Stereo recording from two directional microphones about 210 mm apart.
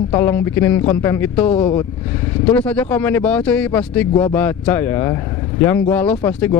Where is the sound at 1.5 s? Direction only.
25° left (ahead or behind).